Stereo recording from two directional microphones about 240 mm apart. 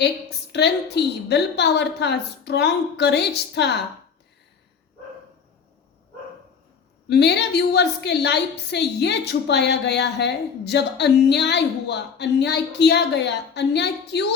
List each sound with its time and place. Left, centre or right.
0.0 s a woman's voice: left
7.1 s a woman's voice: left